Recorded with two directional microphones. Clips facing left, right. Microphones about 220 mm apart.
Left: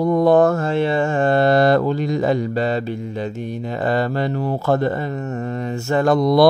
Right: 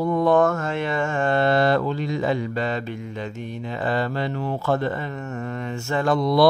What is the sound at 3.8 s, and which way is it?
Speech, 40° left (ahead or behind).